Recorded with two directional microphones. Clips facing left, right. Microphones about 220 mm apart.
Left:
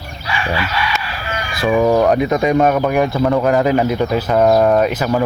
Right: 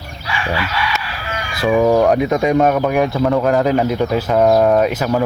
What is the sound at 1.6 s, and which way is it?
Speech, 5° right (ahead or behind).